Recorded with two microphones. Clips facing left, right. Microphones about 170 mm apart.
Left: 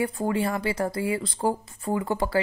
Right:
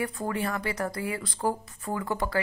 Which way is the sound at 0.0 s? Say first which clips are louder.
Left 5 dB; 30° left (ahead or behind).